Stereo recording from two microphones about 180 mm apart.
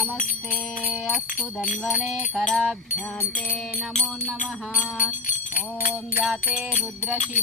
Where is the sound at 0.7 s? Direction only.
50° left (ahead or behind).